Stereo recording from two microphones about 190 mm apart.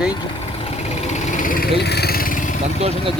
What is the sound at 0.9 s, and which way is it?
Vehicle, 40° left (ahead or behind).